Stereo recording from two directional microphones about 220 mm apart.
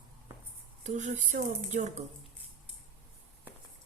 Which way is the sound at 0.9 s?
35° right (ahead or behind).